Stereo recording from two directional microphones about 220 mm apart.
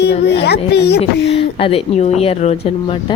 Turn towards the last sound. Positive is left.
turn(degrees=25)  # may be behind; listen again after turning